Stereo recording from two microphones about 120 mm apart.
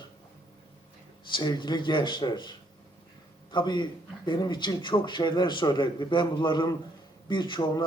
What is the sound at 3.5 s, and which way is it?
Speech, 40° left (ahead or behind).